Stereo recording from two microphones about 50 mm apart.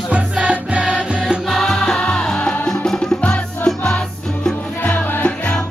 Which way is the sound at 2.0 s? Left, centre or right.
Centre.